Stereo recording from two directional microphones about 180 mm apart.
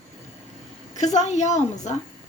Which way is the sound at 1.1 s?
40° left (ahead or behind).